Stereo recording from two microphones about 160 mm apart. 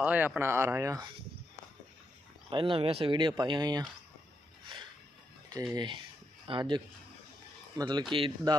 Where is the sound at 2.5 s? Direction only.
30° right (ahead or behind).